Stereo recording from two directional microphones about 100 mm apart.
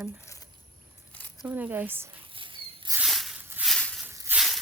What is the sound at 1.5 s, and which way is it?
Speech, 15° right (ahead or behind).